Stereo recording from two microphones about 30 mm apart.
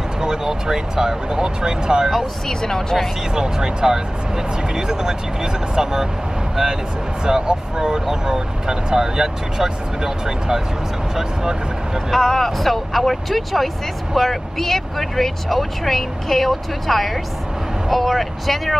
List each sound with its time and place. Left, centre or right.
0.2 s speech: right
2.4 s speech: centre
3.3 s speech: right
12.1 s speech: centre